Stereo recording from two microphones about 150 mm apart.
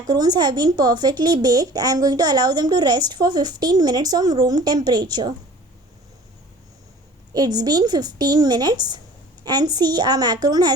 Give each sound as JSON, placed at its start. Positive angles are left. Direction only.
{"t": 0.1, "sound": "a woman's voice", "side_deg": -25}
{"t": 7.3, "sound": "a woman's voice", "side_deg": -25}